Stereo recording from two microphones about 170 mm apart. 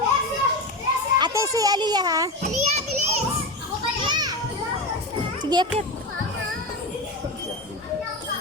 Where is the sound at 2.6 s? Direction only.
40° right (ahead or behind).